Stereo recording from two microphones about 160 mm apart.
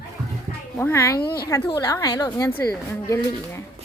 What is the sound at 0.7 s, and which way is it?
Speech, 15° left (ahead or behind).